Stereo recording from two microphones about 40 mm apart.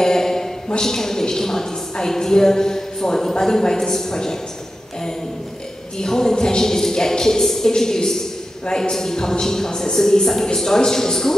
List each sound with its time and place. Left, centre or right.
0.0 s a sound: centre
0.7 s a woman's voice: centre
5.9 s a woman's voice: centre